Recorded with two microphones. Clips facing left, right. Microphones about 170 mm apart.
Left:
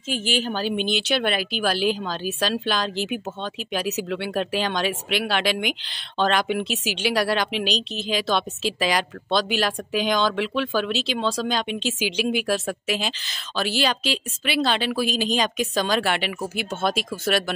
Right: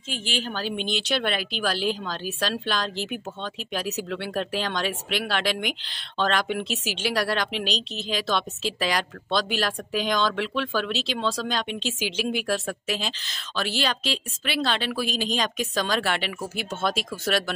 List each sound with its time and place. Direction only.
0.1 s a woman's voice: 5° left (ahead or behind)